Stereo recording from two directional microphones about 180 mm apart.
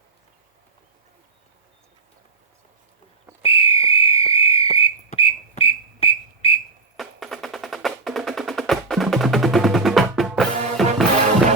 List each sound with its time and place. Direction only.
3.4 s whistle: 30° left (ahead or behind)
6.9 s music: centre (ahead or behind)